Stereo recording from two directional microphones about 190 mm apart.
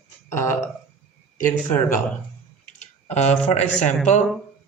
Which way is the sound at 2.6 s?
35° left (ahead or behind).